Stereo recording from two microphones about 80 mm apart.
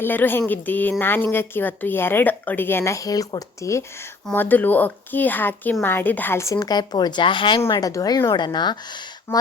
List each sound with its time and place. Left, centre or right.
0.0 s a woman's voice: left
4.4 s a woman's voice: left
6.4 s speech: left
7.8 s speech: left
8.3 s speech: left